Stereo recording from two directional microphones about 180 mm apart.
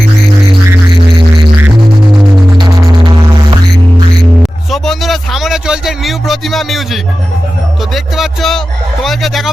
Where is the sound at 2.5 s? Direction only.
25° right (ahead or behind).